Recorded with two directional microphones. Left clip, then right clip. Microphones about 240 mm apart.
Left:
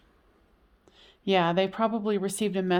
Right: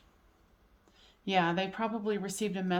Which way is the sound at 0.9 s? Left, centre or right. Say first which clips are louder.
Left 5 dB; left.